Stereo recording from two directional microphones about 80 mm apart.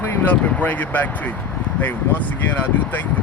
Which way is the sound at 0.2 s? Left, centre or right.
Left.